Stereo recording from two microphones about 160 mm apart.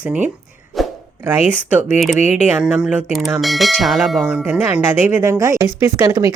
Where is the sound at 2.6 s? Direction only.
5° right (ahead or behind).